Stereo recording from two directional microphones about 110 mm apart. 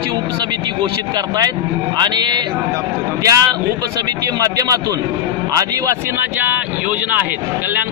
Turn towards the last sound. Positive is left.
turn(degrees=-20)  # may be behind; listen again after turning